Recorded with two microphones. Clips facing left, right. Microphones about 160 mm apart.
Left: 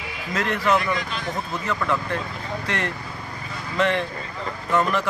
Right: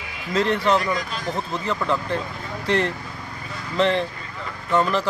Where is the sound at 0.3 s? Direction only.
30° right (ahead or behind).